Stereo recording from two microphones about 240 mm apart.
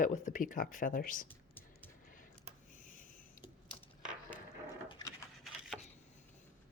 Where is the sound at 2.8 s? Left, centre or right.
Left.